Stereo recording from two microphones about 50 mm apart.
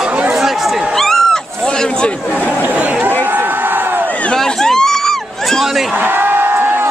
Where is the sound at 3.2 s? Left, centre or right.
Right.